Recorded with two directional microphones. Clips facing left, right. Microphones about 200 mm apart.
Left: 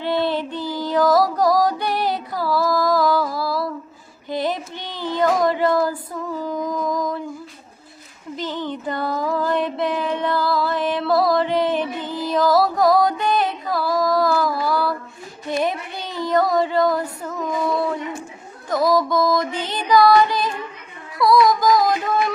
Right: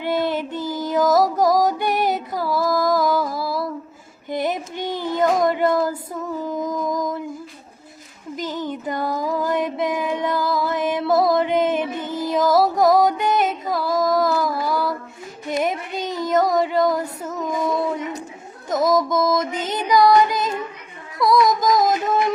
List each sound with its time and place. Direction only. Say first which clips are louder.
0.0 s child singing: left 1 dB; 15° right (ahead or behind)
0.8 s music: even; 20° right (ahead or behind)
4.8 s child singing: right 7 dB; 50° right (ahead or behind)
5.1 s child singing: even; 20° right (ahead or behind)
8.6 s a sound: even; 15° right (ahead or behind)
12.2 s music: even; 20° right (ahead or behind)
15.4 s child singing: even; 20° right (ahead or behind)
16.2 s female singing: even; 20° right (ahead or behind)
18.7 s music: even; 20° right (ahead or behind)
19.7 s female singing: left 1 dB; 20° right (ahead or behind)
21.4 s music: left 1 dB; 20° right (ahead or behind)